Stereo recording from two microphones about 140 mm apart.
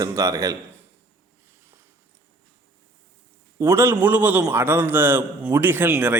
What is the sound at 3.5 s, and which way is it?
A man's voice, 20° right (ahead or behind).